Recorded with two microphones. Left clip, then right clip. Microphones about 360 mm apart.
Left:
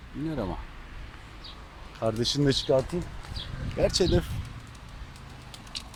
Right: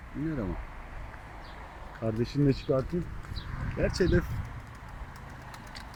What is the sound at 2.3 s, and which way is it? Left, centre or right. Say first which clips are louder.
Speech: left 2 dB; left.